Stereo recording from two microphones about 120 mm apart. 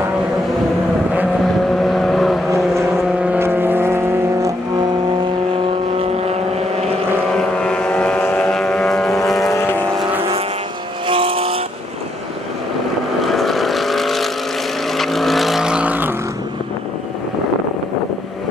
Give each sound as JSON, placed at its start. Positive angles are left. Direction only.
{"t": 1.9, "sound": "vehicle", "side_deg": 0}
{"t": 3.2, "sound": "vehicle", "side_deg": -15}
{"t": 5.9, "sound": "vehicle", "side_deg": -60}
{"t": 7.3, "sound": "vehicle", "side_deg": 10}
{"t": 9.5, "sound": "vehicle", "side_deg": 20}
{"t": 11.1, "sound": "vehicle", "side_deg": -50}
{"t": 13.2, "sound": "vehicle", "side_deg": 0}